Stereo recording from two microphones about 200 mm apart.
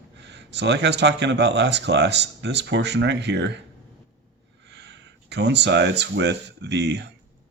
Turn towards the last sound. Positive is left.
turn(degrees=-60)  # may be behind; listen again after turning